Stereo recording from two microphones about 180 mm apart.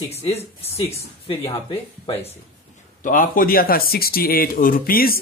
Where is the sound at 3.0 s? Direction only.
45° left (ahead or behind).